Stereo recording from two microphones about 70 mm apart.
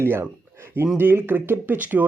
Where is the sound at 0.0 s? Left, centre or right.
Right.